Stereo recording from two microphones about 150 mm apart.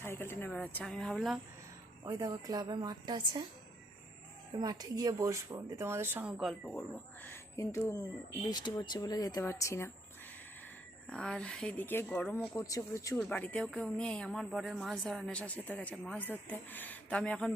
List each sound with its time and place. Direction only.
0.0 s speech: 15° left (ahead or behind)
2.0 s a woman's voice: 25° right (ahead or behind)
4.5 s speech: 25° right (ahead or behind); by 9.9 s 20° left (ahead or behind)
11.0 s speech: 5° left (ahead or behind); by 13.1 s 20° left (ahead or behind)
13.1 s speech: 5° left (ahead or behind)